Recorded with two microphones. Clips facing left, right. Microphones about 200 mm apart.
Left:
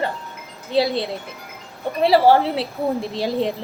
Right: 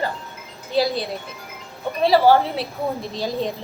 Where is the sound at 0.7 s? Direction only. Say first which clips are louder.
Left 1 dB; 25° left (ahead or behind).